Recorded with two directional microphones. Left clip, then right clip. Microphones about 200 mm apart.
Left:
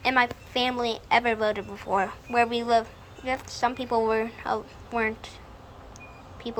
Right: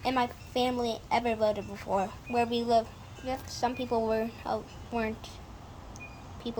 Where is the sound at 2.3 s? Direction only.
Centre (ahead or behind).